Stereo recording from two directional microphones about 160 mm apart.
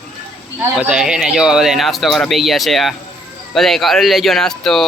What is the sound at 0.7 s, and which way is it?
Speech, 5° right (ahead or behind).